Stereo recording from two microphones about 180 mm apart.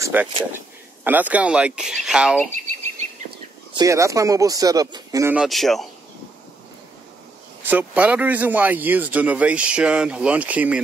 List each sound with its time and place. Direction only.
0.0 s speech: 10° right (ahead or behind)
3.7 s speech: 15° right (ahead or behind)
5.3 s speech: centre (ahead or behind)
7.6 s speech: 10° right (ahead or behind)